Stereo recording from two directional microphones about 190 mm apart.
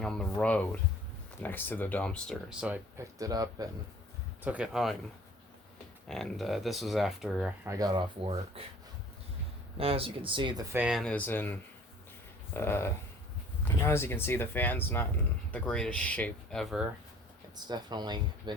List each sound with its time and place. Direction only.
0.0 s speech: 5° left (ahead or behind); by 3.7 s 20° right (ahead or behind)
4.4 s speech: 5° right (ahead or behind)
6.1 s speech: centre (ahead or behind)
7.7 s speech: 20° right (ahead or behind)
9.7 s speech: 30° right (ahead or behind); by 11.5 s 10° left (ahead or behind)
12.5 s speech: 10° left (ahead or behind)
17.6 s speech: 20° right (ahead or behind)